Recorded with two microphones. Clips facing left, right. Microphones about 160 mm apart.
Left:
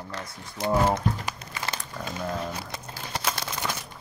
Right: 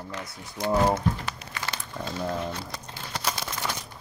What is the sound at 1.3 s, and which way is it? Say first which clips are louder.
Crumpling: left 1 dB; 15° left (ahead or behind).